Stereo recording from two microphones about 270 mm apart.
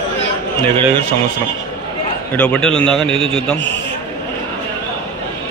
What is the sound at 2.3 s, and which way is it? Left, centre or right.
Speech, centre.